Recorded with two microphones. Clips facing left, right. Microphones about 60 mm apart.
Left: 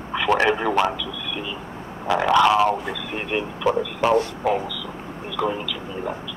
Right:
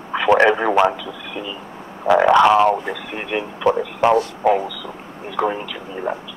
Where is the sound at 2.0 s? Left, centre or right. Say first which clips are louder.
Right 5 dB; right.